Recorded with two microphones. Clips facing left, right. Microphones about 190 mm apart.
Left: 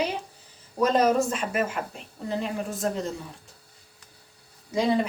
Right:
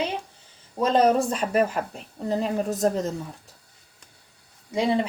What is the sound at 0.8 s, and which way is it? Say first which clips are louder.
Speech: right 1 dB; 30° right (ahead or behind).